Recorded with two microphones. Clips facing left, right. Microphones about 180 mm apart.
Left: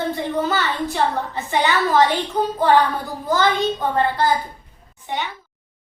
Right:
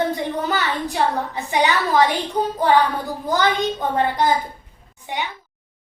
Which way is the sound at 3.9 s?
15° right (ahead or behind).